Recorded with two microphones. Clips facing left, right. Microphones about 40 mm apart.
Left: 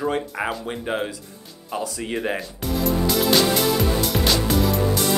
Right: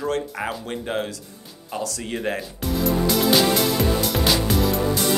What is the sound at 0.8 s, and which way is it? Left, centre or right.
Speech, centre.